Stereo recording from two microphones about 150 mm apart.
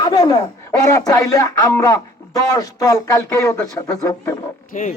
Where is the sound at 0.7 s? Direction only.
20° left (ahead or behind).